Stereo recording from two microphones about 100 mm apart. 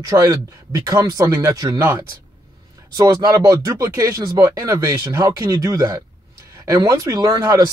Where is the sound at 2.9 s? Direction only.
40° right (ahead or behind).